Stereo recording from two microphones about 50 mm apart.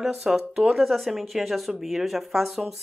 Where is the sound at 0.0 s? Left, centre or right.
Centre.